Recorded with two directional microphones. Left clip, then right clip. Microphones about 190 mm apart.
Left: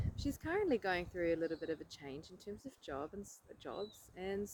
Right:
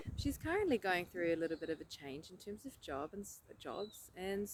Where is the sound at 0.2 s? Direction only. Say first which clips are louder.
Even; 15° right (ahead or behind).